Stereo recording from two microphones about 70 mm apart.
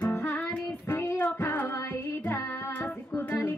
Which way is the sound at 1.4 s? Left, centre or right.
Left.